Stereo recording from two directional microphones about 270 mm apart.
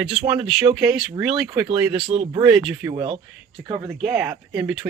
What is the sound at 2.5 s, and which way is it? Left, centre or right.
Speech, centre.